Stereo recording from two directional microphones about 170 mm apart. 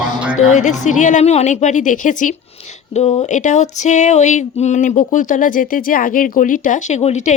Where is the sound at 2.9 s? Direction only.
35° left (ahead or behind).